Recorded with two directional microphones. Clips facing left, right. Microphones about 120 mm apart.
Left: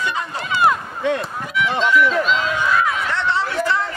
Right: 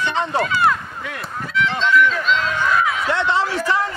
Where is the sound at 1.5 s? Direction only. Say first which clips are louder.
Even; 15° left (ahead or behind).